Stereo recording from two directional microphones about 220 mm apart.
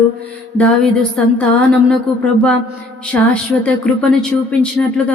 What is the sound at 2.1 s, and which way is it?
Speech, centre (ahead or behind).